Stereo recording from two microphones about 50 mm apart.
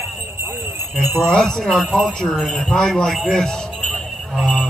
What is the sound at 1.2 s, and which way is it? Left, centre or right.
A man's voice, centre.